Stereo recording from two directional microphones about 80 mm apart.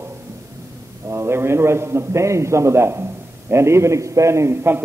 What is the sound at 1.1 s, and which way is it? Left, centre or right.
A man's voice, right.